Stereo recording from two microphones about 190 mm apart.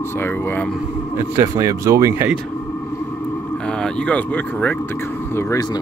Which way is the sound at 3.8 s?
5° left (ahead or behind).